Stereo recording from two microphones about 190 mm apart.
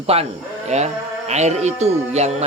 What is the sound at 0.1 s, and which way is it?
A man's voice, 30° right (ahead or behind).